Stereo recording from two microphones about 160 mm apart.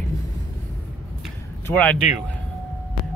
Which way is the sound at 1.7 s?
10° left (ahead or behind).